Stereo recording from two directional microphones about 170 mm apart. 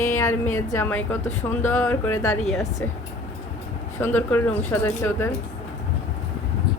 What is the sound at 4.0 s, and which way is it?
Speech, 10° left (ahead or behind).